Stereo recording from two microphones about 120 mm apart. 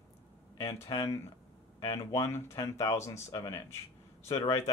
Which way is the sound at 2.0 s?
25° left (ahead or behind).